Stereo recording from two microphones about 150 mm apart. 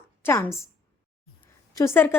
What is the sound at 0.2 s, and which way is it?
Speech, 15° left (ahead or behind).